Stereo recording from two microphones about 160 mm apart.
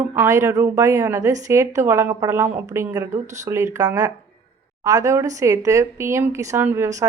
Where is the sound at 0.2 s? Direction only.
15° right (ahead or behind).